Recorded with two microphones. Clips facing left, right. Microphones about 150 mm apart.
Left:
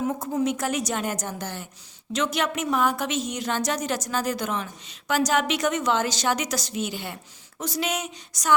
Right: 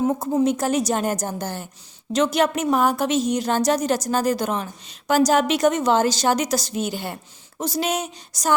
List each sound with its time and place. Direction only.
0.0 s a woman's voice: 30° right (ahead or behind)